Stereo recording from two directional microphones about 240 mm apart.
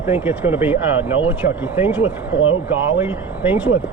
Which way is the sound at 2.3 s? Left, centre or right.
Left.